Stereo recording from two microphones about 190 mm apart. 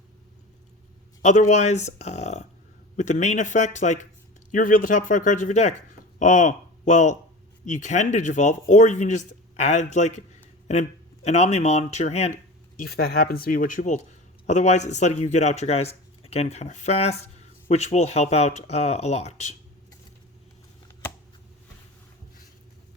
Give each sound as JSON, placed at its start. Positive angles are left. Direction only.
{"t": 1.2, "sound": "speech", "side_deg": 40}
{"t": 12.7, "sound": "speech", "side_deg": 50}